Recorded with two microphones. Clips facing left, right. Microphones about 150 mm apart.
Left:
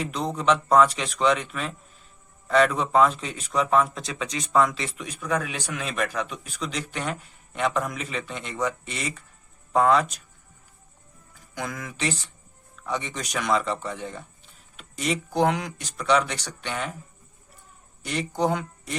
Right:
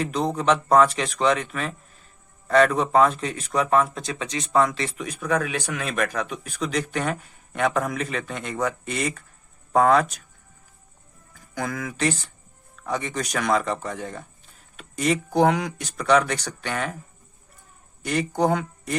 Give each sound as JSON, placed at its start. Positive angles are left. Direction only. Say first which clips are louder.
{"t": 0.3, "sound": "a man's voice", "louder": "right 1 dB", "side_deg": -50}
{"t": 3.9, "sound": "speech", "louder": "right 2 dB", "side_deg": -35}
{"t": 5.2, "sound": "a man's voice", "louder": "right 3 dB", "side_deg": -55}
{"t": 11.5, "sound": "a man's voice", "louder": "right 4 dB", "side_deg": -50}
{"t": 18.0, "sound": "a man's voice", "louder": "right 3 dB", "side_deg": -50}